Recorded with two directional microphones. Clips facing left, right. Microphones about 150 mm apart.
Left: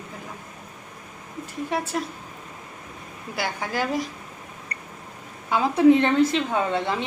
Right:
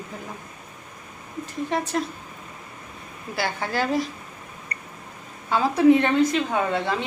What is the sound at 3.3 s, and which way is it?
Speech, 15° left (ahead or behind).